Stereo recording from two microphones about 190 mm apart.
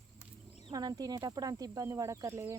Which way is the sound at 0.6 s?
20° right (ahead or behind).